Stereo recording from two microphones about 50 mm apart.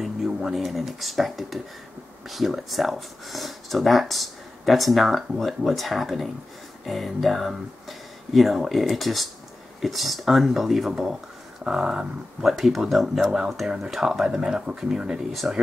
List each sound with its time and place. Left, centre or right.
0.0 s speech: centre
11.6 s speech: centre